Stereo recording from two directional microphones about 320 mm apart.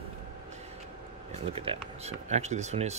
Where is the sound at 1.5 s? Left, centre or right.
Centre.